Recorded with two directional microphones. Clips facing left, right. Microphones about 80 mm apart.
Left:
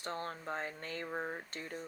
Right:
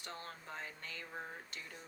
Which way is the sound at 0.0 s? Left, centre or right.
Left.